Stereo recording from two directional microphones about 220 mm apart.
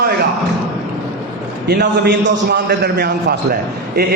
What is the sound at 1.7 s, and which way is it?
A man's voice, 45° right (ahead or behind).